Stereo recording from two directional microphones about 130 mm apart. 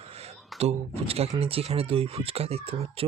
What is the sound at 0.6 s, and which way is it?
Speech, 50° right (ahead or behind).